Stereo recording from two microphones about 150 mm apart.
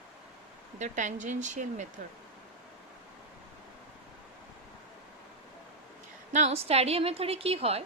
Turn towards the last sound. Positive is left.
turn(degrees=-40)  # may be behind; listen again after turning